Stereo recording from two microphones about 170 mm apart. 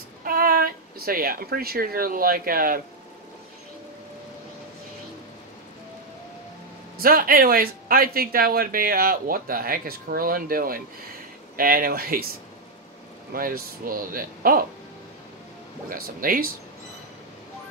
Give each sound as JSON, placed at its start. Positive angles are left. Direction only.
{"t": 0.2, "sound": "speech", "side_deg": -60}
{"t": 7.0, "sound": "speech", "side_deg": -60}
{"t": 13.3, "sound": "speech", "side_deg": -60}
{"t": 15.9, "sound": "speech", "side_deg": -55}